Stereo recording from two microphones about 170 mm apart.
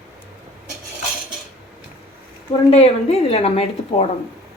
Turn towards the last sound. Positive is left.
turn(degrees=35)  # may be behind; listen again after turning